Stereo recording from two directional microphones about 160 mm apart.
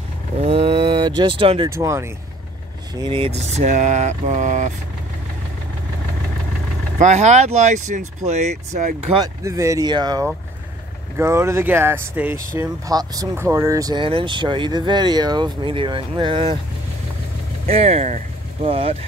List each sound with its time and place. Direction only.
0.4 s speech: 35° right (ahead or behind)
1.7 s speech: 20° right (ahead or behind)
2.9 s speech: 30° right (ahead or behind); by 4.7 s 50° right (ahead or behind)
7.0 s speech: 45° right (ahead or behind)
9.1 s speech: 20° right (ahead or behind)
17.6 s vehicle: 40° right (ahead or behind)
18.7 s speech: 35° right (ahead or behind)